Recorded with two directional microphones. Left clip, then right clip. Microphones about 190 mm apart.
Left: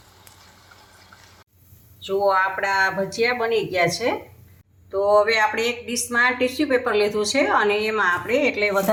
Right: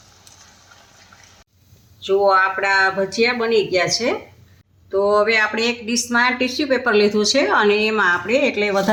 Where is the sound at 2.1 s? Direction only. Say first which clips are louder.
Right 4 dB; 45° right (ahead or behind).